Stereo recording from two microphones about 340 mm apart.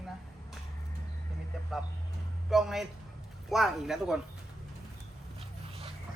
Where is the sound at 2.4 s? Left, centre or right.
Centre.